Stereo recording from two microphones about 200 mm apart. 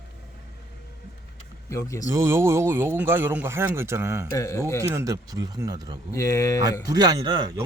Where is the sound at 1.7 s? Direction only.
15° left (ahead or behind).